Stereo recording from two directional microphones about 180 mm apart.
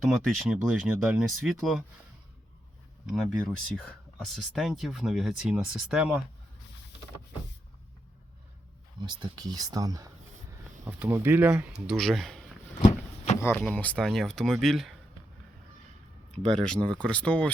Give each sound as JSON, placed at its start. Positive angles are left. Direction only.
{"t": 0.3, "sound": "speech", "side_deg": 0}
{"t": 3.1, "sound": "speech", "side_deg": 0}
{"t": 9.0, "sound": "speech", "side_deg": -25}
{"t": 11.9, "sound": "speech", "side_deg": 0}
{"t": 12.8, "sound": "a sound", "side_deg": 40}
{"t": 13.4, "sound": "speech", "side_deg": 10}
{"t": 16.5, "sound": "speech", "side_deg": 5}